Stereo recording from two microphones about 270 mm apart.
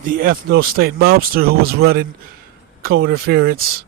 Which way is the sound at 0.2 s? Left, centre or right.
Right.